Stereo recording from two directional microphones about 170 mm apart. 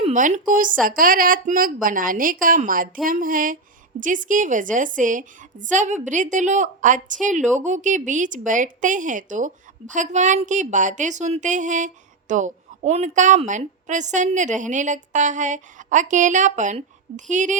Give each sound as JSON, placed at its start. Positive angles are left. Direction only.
{"t": 0.0, "sound": "a woman's voice", "side_deg": -45}